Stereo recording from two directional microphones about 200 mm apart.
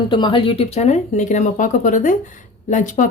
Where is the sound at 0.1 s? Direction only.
25° left (ahead or behind).